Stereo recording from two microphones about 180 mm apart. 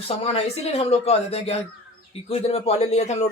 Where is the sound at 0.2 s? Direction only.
35° left (ahead or behind).